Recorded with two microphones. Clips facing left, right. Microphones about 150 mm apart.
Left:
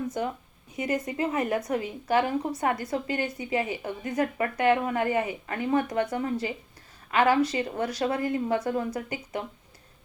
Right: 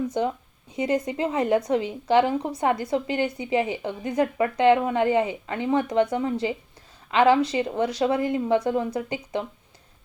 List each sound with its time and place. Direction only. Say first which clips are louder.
0.1 s speech: right 5 dB; 25° right (ahead or behind)